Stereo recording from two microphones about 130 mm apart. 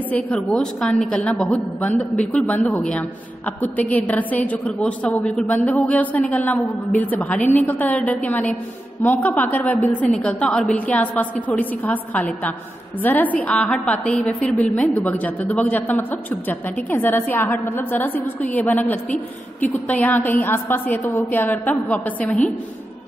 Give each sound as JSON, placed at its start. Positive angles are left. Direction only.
{"t": 0.1, "sound": "a woman's voice", "side_deg": 10}